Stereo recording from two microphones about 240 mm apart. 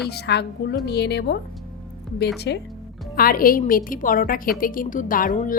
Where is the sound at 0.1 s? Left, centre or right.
Left.